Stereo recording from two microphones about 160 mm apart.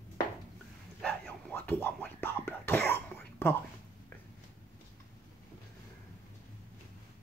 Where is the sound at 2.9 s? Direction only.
15° left (ahead or behind).